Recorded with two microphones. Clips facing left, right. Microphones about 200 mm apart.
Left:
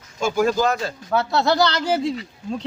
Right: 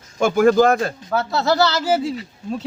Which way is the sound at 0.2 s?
55° right (ahead or behind).